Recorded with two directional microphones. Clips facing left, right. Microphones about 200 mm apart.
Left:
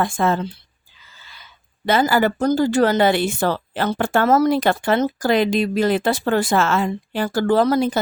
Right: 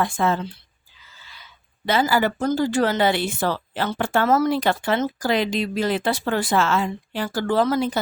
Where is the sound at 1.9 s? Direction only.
50° left (ahead or behind).